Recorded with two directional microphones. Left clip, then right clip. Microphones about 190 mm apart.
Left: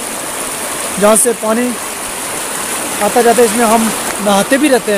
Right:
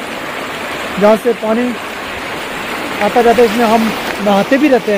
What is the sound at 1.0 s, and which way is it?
Speech, 10° left (ahead or behind).